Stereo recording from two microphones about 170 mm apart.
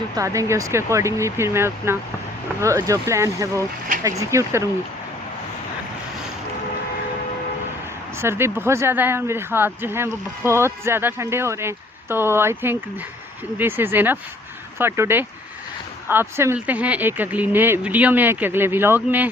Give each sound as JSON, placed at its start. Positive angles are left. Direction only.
{"t": 0.2, "sound": "speech", "side_deg": -20}
{"t": 8.2, "sound": "speech", "side_deg": -15}